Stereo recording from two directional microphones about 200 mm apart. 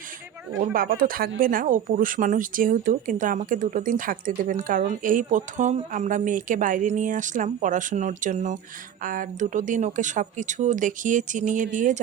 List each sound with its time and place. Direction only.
0.6 s speech: 45° right (ahead or behind)